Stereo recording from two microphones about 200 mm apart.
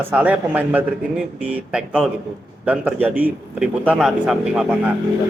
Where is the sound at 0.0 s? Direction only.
5° right (ahead or behind).